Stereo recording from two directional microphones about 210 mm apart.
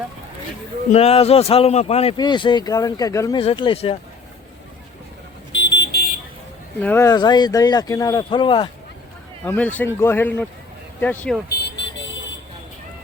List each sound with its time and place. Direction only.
0.9 s speech: 30° left (ahead or behind)
5.5 s vehicle: 60° left (ahead or behind)
6.7 s speech: 10° left (ahead or behind)
9.4 s speech: 10° left (ahead or behind)